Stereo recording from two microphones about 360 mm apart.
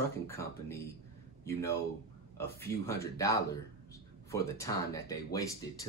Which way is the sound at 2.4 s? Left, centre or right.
Centre.